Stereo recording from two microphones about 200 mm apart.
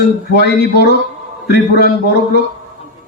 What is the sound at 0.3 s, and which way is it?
Speech, 55° left (ahead or behind).